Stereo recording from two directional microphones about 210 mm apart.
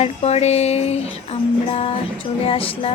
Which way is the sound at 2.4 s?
25° left (ahead or behind).